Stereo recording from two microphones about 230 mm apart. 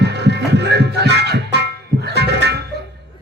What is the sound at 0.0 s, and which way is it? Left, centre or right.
Music, right.